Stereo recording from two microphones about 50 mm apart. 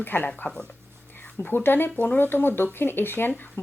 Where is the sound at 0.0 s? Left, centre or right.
Left.